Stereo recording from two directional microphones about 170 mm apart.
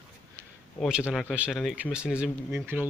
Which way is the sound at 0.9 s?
5° right (ahead or behind).